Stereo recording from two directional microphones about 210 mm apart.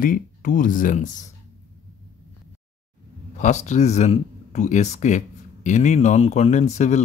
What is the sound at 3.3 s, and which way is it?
Speech, 35° left (ahead or behind).